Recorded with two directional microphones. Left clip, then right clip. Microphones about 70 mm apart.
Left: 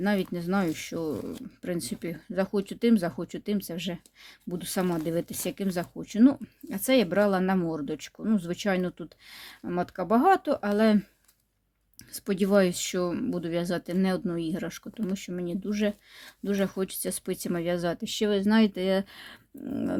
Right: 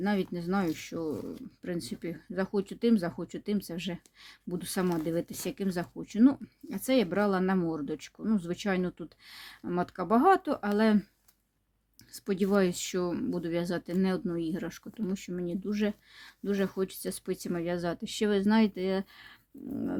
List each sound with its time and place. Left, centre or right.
0.0 s speech: left
1.2 s speech: left
1.6 s speech: left
12.1 s speech: left
18.1 s speech: centre
18.4 s speech: left